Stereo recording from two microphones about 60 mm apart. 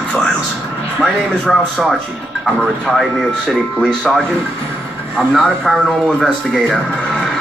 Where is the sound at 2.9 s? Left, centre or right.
Centre.